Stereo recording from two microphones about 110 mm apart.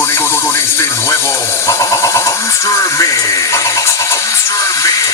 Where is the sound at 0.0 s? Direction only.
25° left (ahead or behind).